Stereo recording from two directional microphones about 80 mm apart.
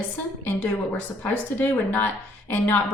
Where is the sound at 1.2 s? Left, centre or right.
Left.